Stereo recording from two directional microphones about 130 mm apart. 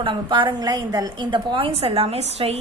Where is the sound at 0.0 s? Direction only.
40° right (ahead or behind).